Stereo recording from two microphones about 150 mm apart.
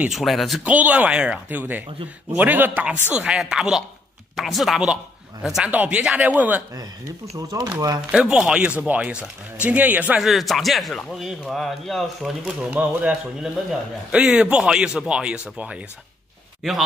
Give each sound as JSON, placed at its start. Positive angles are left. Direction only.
{"t": 0.0, "sound": "a man's voice", "side_deg": 0}
{"t": 6.7, "sound": "speech", "side_deg": -25}
{"t": 8.1, "sound": "a man's voice", "side_deg": -5}